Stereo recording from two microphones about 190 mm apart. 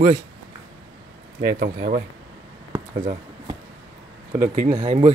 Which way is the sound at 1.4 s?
60° right (ahead or behind).